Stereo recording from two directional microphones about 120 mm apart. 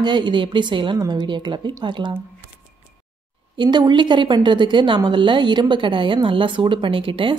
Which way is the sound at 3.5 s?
40° right (ahead or behind).